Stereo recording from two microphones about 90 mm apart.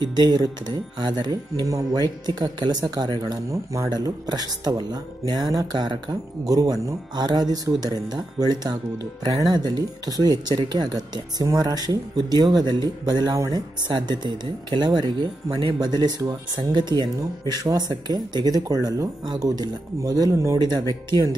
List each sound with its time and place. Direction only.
0.0 s speech: 50° right (ahead or behind)
2.2 s speech: 50° right (ahead or behind)
3.4 s speech: 35° right (ahead or behind)
3.9 s speech: 50° right (ahead or behind)